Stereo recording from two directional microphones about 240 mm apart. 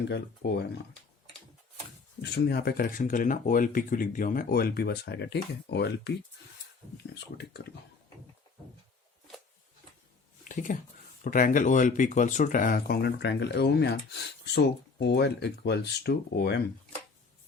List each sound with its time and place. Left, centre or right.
0.1 s speech: left
2.3 s speech: left
10.5 s speech: left